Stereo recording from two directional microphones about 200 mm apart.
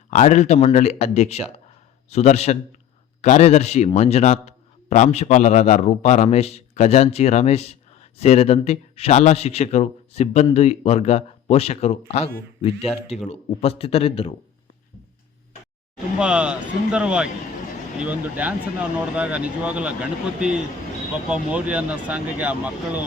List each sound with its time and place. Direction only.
0.1 s a man's voice: 35° left (ahead or behind)
16.1 s speech: 5° right (ahead or behind)